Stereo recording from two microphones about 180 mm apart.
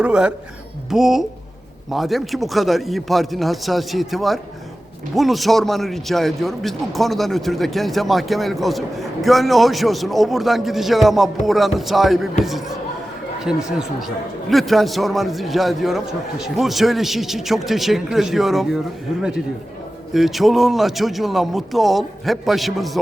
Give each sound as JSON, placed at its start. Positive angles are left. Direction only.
{"t": 0.0, "sound": "a man's voice", "side_deg": -5}
{"t": 20.1, "sound": "a man's voice", "side_deg": 0}